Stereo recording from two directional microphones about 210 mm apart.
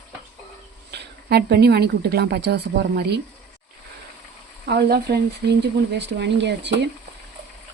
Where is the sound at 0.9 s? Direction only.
50° right (ahead or behind).